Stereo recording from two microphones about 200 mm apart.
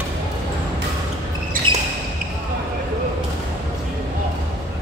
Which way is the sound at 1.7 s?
25° right (ahead or behind).